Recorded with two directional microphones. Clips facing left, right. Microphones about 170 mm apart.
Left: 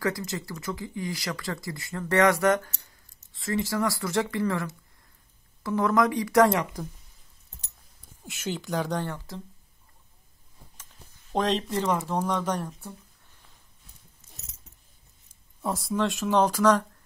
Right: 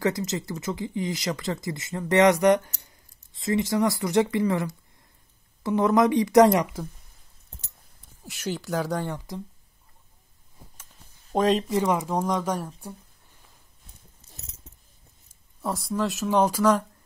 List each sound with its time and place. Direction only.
0.0 s speech: 20° right (ahead or behind)
8.3 s speech: centre (ahead or behind)
9.0 s speech: 15° right (ahead or behind)
11.3 s speech: 10° right (ahead or behind)
14.7 s keys jangling: 25° right (ahead or behind)
15.6 s speech: centre (ahead or behind)